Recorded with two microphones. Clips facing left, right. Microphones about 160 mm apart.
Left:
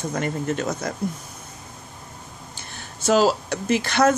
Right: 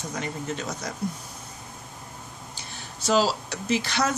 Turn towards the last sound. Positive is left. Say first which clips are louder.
# left 6 dB
turn(degrees=55)  # may be behind; listen again after turning